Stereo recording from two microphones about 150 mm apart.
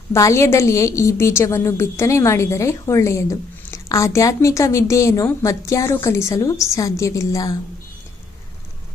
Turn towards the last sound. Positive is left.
turn(degrees=20)  # may be behind; listen again after turning